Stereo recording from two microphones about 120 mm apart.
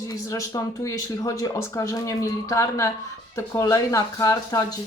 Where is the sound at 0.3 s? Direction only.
25° left (ahead or behind).